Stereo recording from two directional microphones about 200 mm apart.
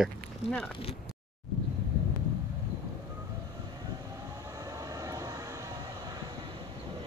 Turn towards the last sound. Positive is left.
turn(degrees=-15)  # may be behind; listen again after turning